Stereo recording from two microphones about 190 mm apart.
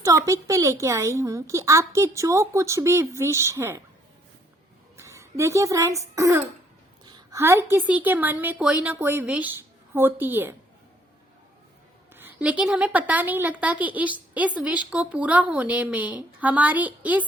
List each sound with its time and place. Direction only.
0.0 s a woman's voice: 15° right (ahead or behind)
4.9 s a woman's voice: 15° right (ahead or behind)
12.1 s a woman's voice: 10° right (ahead or behind)